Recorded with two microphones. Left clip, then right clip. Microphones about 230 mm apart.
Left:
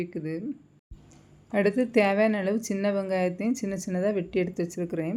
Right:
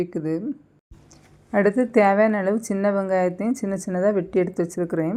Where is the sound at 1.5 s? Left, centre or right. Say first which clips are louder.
Right 5 dB; centre.